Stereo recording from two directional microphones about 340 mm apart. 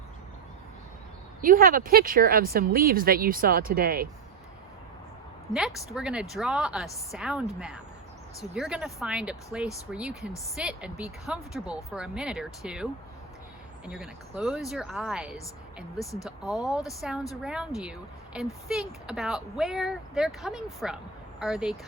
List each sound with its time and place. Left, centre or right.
1.4 s speech: right
5.5 s a woman's voice: centre